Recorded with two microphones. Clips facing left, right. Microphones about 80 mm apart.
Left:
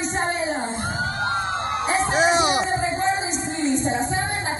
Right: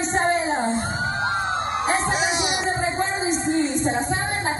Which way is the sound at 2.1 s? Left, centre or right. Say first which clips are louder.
Left 5 dB; left.